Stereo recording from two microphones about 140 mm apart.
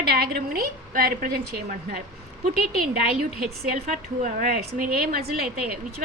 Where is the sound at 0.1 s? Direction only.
90° right.